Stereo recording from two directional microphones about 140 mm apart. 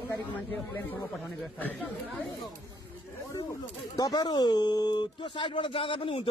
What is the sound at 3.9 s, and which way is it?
Speech, 30° left (ahead or behind).